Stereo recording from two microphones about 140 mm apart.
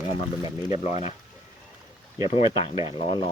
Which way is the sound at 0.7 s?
55° left (ahead or behind).